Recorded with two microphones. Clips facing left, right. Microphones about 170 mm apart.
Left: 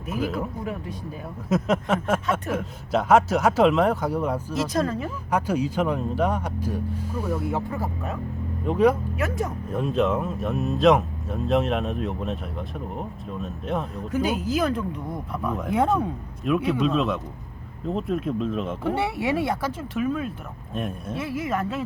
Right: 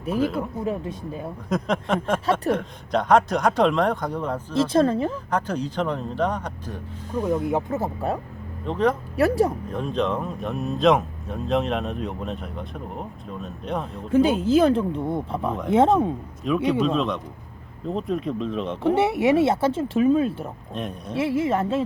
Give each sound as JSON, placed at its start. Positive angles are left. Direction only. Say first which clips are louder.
{"t": 0.2, "sound": "speech", "louder": "right 3 dB", "side_deg": 0}
{"t": 0.6, "sound": "speech", "louder": "right 4 dB", "side_deg": -25}
{"t": 1.5, "sound": "speech", "louder": "left 2 dB", "side_deg": 5}
{"t": 4.5, "sound": "speech", "louder": "right 9 dB", "side_deg": -30}
{"t": 5.3, "sound": "speech", "louder": "left 2 dB", "side_deg": 10}
{"t": 7.4, "sound": "speech", "louder": "right 3 dB", "side_deg": -20}
{"t": 8.6, "sound": "speech", "louder": "left 3 dB", "side_deg": 10}
{"t": 9.1, "sound": "speech", "louder": "right 8 dB", "side_deg": -35}
{"t": 9.7, "sound": "speech", "louder": "left 5 dB", "side_deg": 5}
{"t": 14.1, "sound": "speech", "louder": "right 7 dB", "side_deg": -30}
{"t": 16.4, "sound": "speech", "louder": "right 1 dB", "side_deg": 5}
{"t": 18.9, "sound": "speech", "louder": "right 7 dB", "side_deg": -20}
{"t": 20.7, "sound": "speech", "louder": "left 2 dB", "side_deg": 5}
{"t": 21.2, "sound": "speech", "louder": "right 6 dB", "side_deg": -30}